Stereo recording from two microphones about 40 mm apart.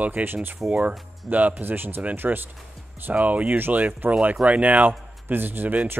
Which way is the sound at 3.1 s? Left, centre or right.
Right.